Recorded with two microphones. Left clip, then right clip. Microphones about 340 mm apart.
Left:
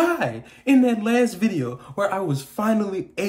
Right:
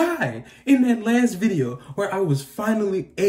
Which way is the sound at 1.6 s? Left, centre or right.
Centre.